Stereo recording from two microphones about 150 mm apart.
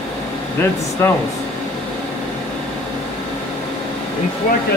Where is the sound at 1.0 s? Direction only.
15° left (ahead or behind).